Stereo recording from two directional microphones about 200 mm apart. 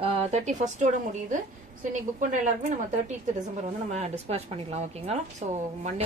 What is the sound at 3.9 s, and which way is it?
Speech, 30° right (ahead or behind).